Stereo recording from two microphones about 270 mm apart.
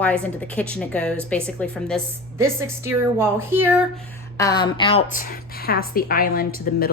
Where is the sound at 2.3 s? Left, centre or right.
Centre.